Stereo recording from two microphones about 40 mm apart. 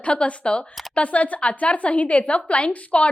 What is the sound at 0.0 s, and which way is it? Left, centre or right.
A woman's voice, left.